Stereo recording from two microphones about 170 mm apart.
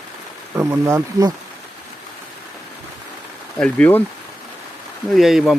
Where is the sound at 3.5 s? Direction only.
5° left (ahead or behind).